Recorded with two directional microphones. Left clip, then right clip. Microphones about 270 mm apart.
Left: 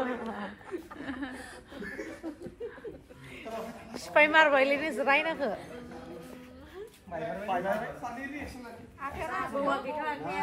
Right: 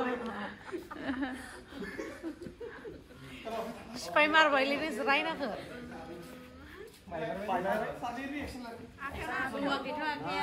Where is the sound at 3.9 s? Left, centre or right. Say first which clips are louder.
Left 4 dB; left.